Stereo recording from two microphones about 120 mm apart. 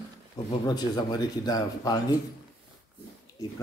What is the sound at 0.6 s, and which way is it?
A man's voice, 35° left (ahead or behind).